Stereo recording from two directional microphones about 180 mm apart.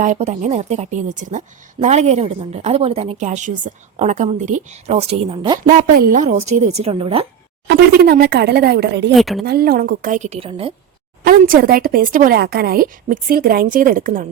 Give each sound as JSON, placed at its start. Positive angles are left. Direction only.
{"t": 0.0, "sound": "a woman's voice", "side_deg": -40}
{"t": 5.6, "sound": "a woman's voice", "side_deg": -50}
{"t": 7.7, "sound": "speech", "side_deg": -60}
{"t": 9.1, "sound": "speech", "side_deg": 0}
{"t": 9.4, "sound": "speech", "side_deg": -60}
{"t": 11.2, "sound": "speech", "side_deg": -55}